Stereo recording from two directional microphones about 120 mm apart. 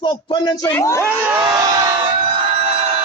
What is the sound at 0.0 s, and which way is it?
Speech, 45° left (ahead or behind).